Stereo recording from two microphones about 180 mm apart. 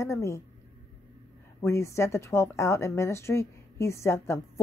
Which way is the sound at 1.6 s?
15° left (ahead or behind).